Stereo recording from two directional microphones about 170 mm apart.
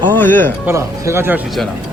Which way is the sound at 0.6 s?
15° right (ahead or behind).